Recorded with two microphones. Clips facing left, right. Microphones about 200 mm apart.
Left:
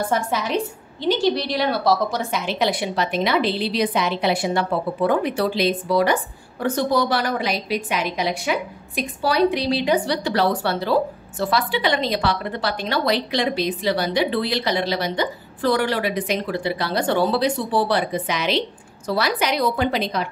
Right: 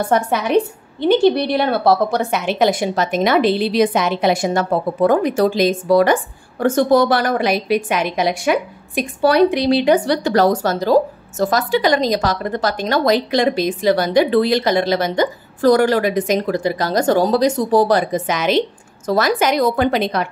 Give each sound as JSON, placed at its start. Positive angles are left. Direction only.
{"t": 0.1, "sound": "a woman's voice", "side_deg": -60}